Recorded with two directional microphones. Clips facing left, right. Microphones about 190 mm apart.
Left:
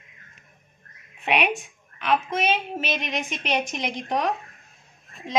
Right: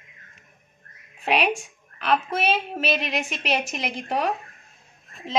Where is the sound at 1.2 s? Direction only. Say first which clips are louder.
Right 1 dB; 35° right (ahead or behind).